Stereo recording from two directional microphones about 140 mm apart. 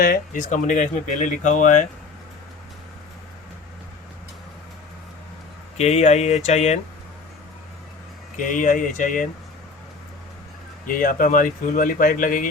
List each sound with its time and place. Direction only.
0.0 s speech: 70° left (ahead or behind)
5.7 s speech: 50° left (ahead or behind)
8.4 s speech: 70° left (ahead or behind)
10.8 s speech: 85° left; by 12.5 s 70° left (ahead or behind)